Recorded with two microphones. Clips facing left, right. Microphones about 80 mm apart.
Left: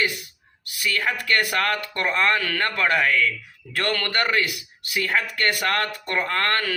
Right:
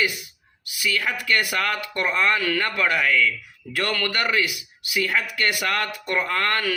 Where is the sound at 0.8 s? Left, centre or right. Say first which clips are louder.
Even; left.